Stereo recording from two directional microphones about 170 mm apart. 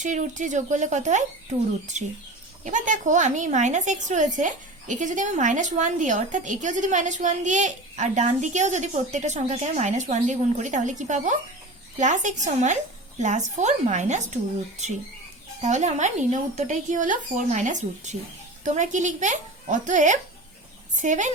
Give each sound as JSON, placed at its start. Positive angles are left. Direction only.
{"t": 0.0, "sound": "a woman's voice", "side_deg": -45}
{"t": 2.6, "sound": "a woman's voice", "side_deg": -45}
{"t": 15.6, "sound": "a woman's voice", "side_deg": -45}